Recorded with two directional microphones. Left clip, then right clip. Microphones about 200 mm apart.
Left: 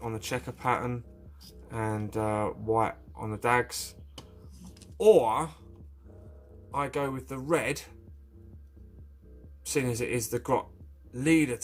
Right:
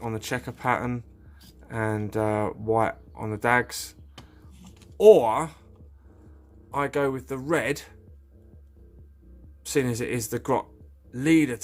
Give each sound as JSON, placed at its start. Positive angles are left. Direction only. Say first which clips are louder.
{"t": 0.0, "sound": "speech", "louder": "right 3 dB", "side_deg": -35}
{"t": 4.9, "sound": "speech", "louder": "right 5 dB", "side_deg": -40}
{"t": 6.7, "sound": "speech", "louder": "right 5 dB", "side_deg": -35}
{"t": 9.6, "sound": "speech", "louder": "right 4 dB", "side_deg": -35}